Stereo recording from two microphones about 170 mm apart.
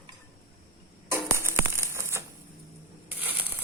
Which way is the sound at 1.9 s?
15° right (ahead or behind).